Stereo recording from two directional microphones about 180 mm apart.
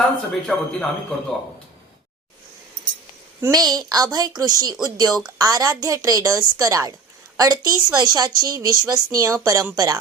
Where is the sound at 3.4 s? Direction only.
20° right (ahead or behind).